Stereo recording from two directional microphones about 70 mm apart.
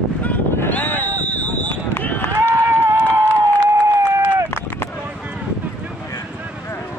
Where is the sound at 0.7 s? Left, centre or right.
Left.